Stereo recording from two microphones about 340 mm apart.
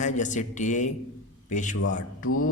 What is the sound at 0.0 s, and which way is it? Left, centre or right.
A man's voice, left.